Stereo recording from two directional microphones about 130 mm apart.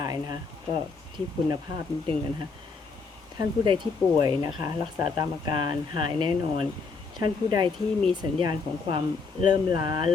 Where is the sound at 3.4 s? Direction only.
35° right (ahead or behind).